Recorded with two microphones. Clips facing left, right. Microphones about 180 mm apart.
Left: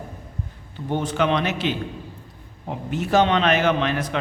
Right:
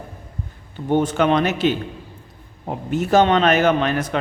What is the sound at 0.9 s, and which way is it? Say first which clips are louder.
A man's voice: right 5 dB; 50° right (ahead or behind).